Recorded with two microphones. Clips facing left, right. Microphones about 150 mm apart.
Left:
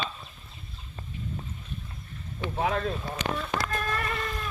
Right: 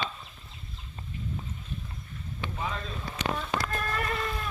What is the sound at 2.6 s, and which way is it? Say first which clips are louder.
Speech: left 9 dB; 70° left (ahead or behind).